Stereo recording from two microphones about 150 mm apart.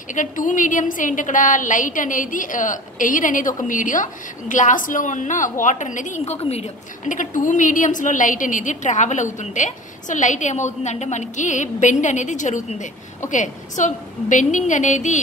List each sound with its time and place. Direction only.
0.1 s a woman's voice: 60° left (ahead or behind)